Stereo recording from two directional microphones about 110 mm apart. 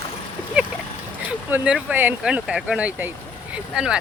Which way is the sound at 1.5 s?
15° right (ahead or behind).